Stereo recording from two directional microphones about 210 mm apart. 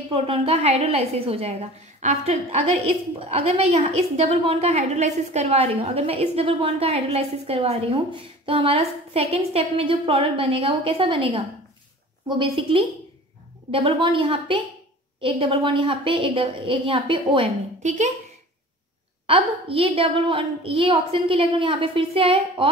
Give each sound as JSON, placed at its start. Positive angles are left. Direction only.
{"t": 0.1, "sound": "a woman's voice", "side_deg": -30}
{"t": 17.8, "sound": "speech", "side_deg": -35}
{"t": 19.2, "sound": "a woman's voice", "side_deg": -25}